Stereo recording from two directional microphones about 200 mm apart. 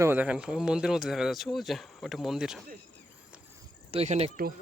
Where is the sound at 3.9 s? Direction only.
30° right (ahead or behind).